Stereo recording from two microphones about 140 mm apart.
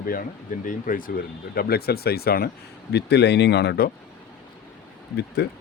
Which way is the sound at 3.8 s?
90° left.